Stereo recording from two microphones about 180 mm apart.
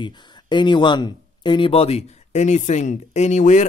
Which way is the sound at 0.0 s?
25° left (ahead or behind).